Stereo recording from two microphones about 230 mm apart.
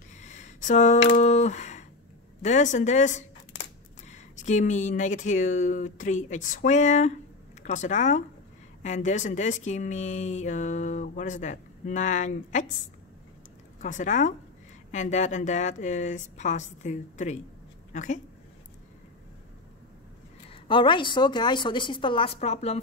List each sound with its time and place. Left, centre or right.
0.2 s a sound: left
2.4 s speech: left
13.7 s speech: left
20.4 s a woman's voice: left